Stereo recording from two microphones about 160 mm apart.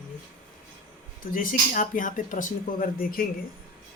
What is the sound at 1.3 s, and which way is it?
Speech, 60° left (ahead or behind).